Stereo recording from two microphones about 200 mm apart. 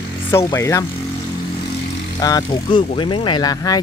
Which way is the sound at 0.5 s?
15° left (ahead or behind).